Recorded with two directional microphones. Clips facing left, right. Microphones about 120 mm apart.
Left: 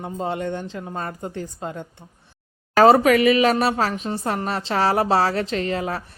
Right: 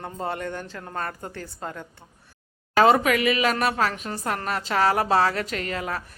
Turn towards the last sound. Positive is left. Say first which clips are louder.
# left 5 dB
turn(degrees=30)  # may be behind; listen again after turning